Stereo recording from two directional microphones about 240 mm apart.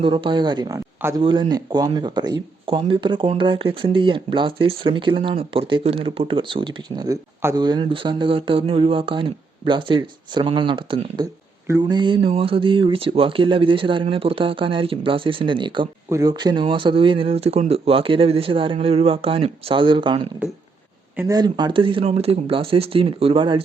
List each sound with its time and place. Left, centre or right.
0.0 s speech: right